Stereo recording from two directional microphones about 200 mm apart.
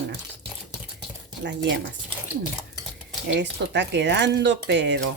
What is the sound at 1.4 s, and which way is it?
Speech, 60° right (ahead or behind).